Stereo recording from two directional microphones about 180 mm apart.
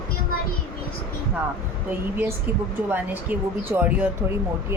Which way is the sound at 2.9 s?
10° right (ahead or behind).